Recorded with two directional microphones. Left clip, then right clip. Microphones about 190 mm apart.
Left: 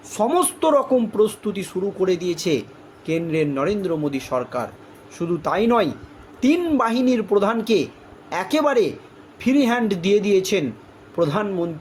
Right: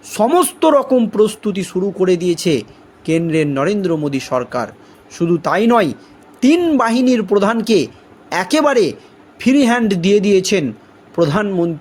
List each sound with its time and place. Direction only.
0.1 s a man's voice: 40° right (ahead or behind)